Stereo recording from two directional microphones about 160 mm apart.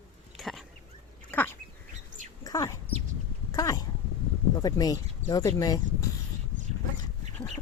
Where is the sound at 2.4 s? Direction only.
20° left (ahead or behind).